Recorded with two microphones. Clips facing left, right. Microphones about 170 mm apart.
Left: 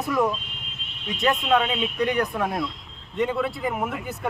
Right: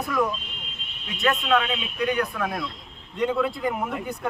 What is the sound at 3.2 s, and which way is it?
Speech, centre (ahead or behind).